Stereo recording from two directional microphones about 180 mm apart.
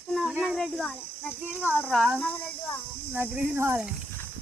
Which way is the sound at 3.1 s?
10° right (ahead or behind).